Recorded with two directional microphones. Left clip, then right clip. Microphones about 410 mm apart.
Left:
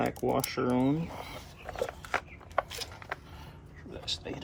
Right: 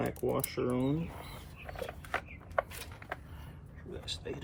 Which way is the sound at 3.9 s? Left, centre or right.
Centre.